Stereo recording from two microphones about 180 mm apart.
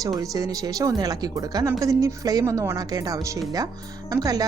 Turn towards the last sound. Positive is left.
turn(degrees=-20)  # may be behind; listen again after turning